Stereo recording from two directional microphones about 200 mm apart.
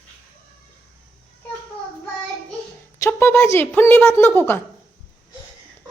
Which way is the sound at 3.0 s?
10° left (ahead or behind).